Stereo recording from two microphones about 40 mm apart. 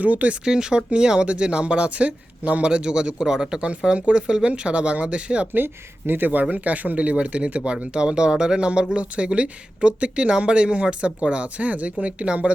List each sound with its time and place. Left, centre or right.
0.0 s speech: right
0.4 s speech: centre
5.5 s speech: right
6.5 s speech: right